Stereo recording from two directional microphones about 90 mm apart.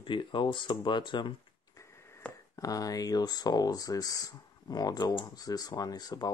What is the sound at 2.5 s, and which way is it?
Speech, 40° left (ahead or behind).